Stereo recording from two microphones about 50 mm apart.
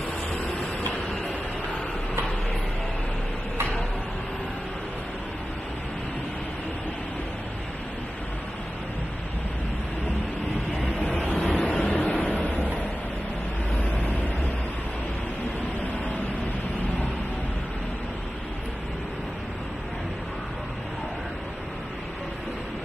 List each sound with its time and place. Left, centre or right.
0.6 s vehicle: left
10.8 s vehicle: left